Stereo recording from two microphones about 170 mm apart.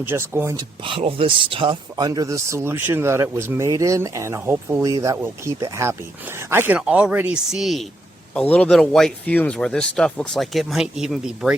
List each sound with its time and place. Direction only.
0.0 s speech: 15° right (ahead or behind)
0.9 s speech: 35° right (ahead or behind); by 11.5 s 5° right (ahead or behind)